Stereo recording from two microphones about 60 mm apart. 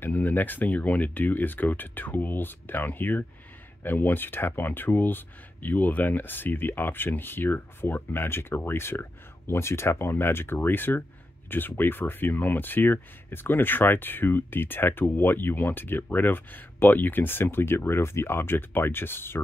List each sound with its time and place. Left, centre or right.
0.0 s speech: left